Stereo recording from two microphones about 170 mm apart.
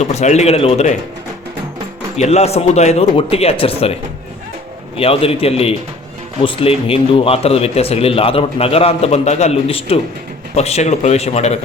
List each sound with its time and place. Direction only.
0.0 s a man's voice: 40° left (ahead or behind)
2.1 s a man's voice: 40° left (ahead or behind)
4.9 s a man's voice: 35° left (ahead or behind)